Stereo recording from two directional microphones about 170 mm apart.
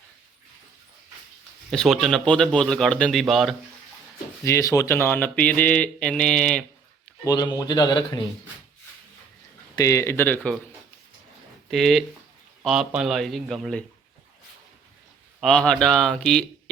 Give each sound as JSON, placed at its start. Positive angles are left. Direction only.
{"t": 1.7, "sound": "a man's voice", "side_deg": 0}
{"t": 4.4, "sound": "speech", "side_deg": 15}
{"t": 7.3, "sound": "a man's voice", "side_deg": 25}
{"t": 9.7, "sound": "speech", "side_deg": 20}
{"t": 11.7, "sound": "a man's voice", "side_deg": 0}
{"t": 15.4, "sound": "a man's voice", "side_deg": 5}